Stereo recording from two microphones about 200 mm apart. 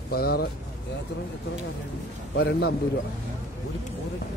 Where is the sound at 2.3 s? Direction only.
55° left (ahead or behind).